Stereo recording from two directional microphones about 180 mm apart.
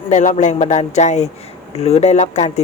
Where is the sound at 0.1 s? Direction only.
40° left (ahead or behind).